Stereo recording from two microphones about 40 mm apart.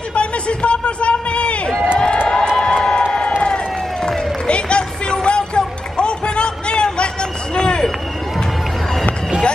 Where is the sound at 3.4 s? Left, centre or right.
Left.